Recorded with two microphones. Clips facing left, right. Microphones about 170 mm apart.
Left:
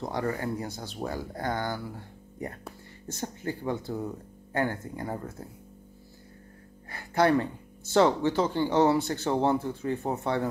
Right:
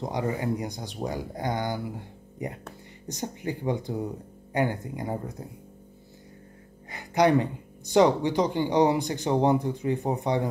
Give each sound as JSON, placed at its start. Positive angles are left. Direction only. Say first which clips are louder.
{"t": 0.0, "sound": "speech", "louder": "right 2 dB", "side_deg": -15}
{"t": 6.9, "sound": "speech", "louder": "right 2 dB", "side_deg": -20}